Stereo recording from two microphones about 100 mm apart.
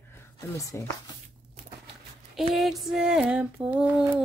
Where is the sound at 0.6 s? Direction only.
35° left (ahead or behind).